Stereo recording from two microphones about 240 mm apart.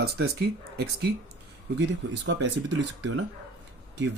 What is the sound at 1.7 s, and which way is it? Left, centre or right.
Speech, right.